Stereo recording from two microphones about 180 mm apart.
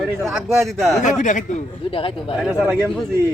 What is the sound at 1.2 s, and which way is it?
Speech, 45° left (ahead or behind).